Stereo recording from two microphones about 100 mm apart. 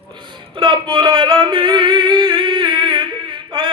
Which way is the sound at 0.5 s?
55° right (ahead or behind).